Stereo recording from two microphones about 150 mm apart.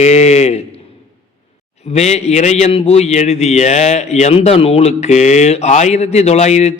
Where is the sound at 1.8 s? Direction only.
45° left (ahead or behind).